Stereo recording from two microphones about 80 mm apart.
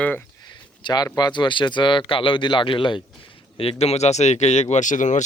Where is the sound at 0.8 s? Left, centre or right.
Left.